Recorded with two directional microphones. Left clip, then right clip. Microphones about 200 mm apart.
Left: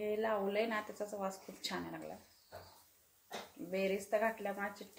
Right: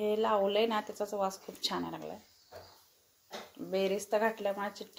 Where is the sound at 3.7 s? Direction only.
35° right (ahead or behind).